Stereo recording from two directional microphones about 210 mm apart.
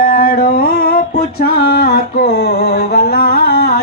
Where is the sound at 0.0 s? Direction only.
45° left (ahead or behind).